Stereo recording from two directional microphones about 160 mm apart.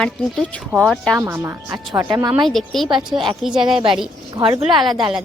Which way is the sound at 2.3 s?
Centre (ahead or behind).